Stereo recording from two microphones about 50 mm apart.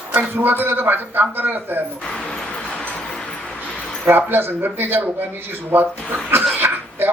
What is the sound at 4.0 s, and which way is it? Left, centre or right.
Speech, right.